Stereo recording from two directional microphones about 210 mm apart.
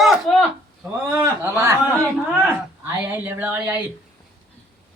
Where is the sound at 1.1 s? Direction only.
10° right (ahead or behind).